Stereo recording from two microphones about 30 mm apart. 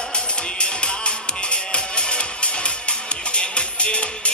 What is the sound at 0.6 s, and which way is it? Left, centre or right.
Music, left.